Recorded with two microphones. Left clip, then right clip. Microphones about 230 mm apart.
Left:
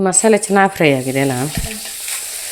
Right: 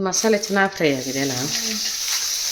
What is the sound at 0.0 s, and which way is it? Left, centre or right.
Speech, left.